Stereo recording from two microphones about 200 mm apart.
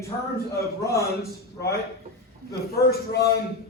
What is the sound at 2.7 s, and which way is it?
Speech, 50° left (ahead or behind).